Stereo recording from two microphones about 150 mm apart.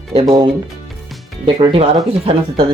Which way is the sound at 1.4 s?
35° right (ahead or behind).